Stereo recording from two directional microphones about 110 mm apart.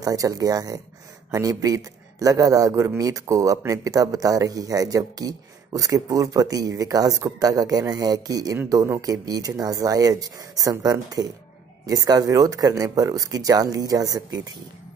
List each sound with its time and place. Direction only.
0.0 s speech: 30° right (ahead or behind)